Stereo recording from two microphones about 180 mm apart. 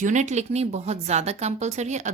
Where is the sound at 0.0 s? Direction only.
40° right (ahead or behind).